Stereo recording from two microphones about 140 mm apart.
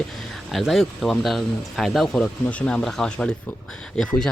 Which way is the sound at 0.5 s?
Centre (ahead or behind).